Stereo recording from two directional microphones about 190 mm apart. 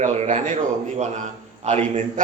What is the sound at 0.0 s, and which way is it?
A man's voice, 40° right (ahead or behind).